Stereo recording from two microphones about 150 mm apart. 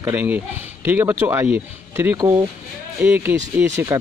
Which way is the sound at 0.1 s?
10° right (ahead or behind).